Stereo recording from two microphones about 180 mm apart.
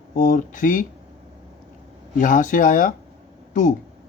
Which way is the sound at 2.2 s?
45° left (ahead or behind).